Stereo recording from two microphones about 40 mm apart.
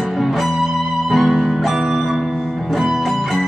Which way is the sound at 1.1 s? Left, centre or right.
Centre.